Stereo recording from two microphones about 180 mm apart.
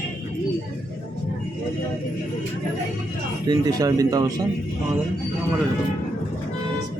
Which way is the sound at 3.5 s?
20° right (ahead or behind).